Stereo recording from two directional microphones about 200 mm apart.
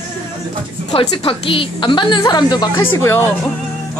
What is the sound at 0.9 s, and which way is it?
A woman's voice, 25° left (ahead or behind).